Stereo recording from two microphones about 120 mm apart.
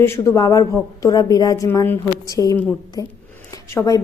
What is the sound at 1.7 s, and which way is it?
Speech, 20° left (ahead or behind).